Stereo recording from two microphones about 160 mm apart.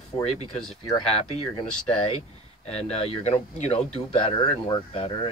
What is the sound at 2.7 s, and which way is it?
Speech, 40° left (ahead or behind).